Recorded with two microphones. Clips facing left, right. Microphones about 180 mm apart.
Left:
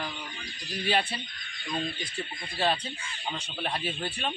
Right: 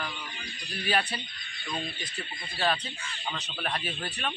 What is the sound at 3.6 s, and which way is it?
Speech, 25° left (ahead or behind).